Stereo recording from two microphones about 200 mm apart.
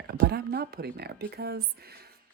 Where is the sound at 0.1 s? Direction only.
55° right (ahead or behind).